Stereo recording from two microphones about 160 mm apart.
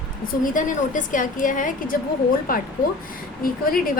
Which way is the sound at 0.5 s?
55° left (ahead or behind).